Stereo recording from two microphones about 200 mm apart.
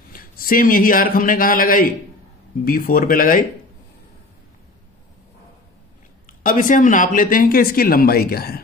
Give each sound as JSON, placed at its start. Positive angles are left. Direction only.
{"t": 0.1, "sound": "a man's voice", "side_deg": 45}
{"t": 6.2, "sound": "speech", "side_deg": 45}